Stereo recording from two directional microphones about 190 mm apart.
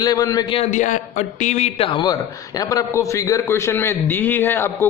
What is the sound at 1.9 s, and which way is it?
A man's voice, 25° left (ahead or behind).